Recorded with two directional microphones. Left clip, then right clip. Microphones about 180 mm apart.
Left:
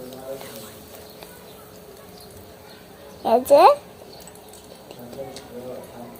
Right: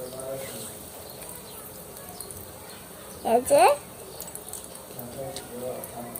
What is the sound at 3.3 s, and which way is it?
Speech, 30° left (ahead or behind).